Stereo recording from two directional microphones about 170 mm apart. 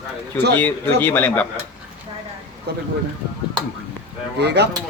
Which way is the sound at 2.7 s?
85° right.